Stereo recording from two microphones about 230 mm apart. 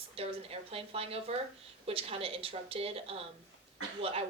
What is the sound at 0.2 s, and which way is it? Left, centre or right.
A woman's voice, right.